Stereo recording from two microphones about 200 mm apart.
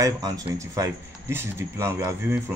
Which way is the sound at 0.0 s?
15° right (ahead or behind).